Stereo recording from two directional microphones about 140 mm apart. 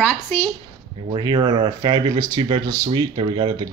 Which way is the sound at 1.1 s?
35° right (ahead or behind).